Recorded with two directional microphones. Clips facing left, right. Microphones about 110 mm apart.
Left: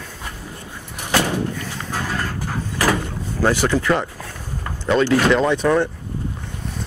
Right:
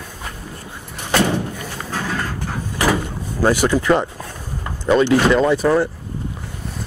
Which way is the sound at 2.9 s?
15° right (ahead or behind).